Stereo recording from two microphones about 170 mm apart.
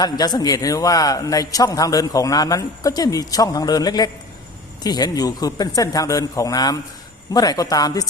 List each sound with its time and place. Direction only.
0.0 s a man's voice: 25° left (ahead or behind)